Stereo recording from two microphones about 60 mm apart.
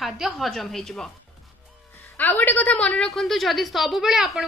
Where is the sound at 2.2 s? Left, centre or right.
Left.